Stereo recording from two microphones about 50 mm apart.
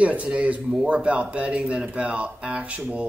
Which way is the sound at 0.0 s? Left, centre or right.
Right.